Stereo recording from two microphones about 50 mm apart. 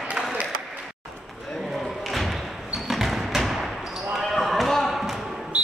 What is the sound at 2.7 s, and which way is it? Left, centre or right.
Basketball bounce, centre.